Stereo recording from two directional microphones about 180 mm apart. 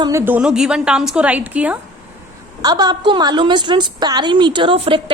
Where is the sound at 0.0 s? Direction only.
15° right (ahead or behind).